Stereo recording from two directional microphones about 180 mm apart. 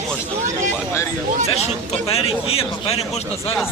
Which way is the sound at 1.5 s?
35° left (ahead or behind).